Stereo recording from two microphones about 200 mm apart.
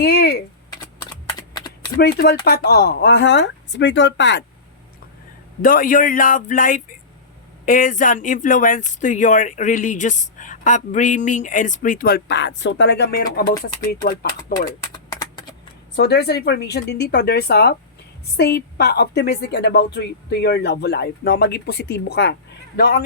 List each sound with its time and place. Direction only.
0.0 s typing: 55° left (ahead or behind)
1.4 s typing: 20° left (ahead or behind)
2.0 s a woman's voice: 50° left (ahead or behind)
5.6 s speech: 45° left (ahead or behind)
14.9 s a sound: 20° left (ahead or behind)
16.0 s a woman's voice: 55° left (ahead or behind)